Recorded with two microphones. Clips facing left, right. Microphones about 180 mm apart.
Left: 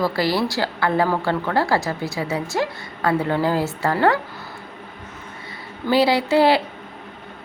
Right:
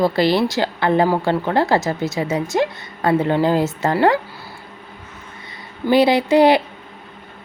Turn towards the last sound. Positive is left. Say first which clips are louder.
# right 3 dB
turn(degrees=-15)  # may be behind; listen again after turning